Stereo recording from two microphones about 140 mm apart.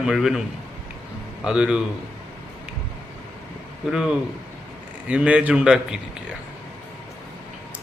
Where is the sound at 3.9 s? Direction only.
5° right (ahead or behind).